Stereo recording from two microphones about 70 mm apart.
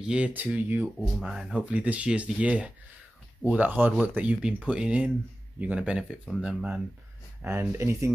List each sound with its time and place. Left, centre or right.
0.0 s speech: centre
0.6 s speech: right
1.3 s speech: centre
1.7 s speech: centre
7.4 s speech: right